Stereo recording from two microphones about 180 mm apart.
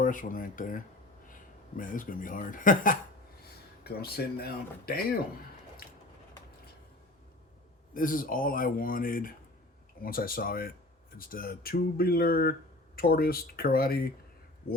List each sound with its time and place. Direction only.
0.0 s speech: 50° left (ahead or behind)
3.8 s speech: 60° left (ahead or behind)
7.9 s speech: 50° left (ahead or behind)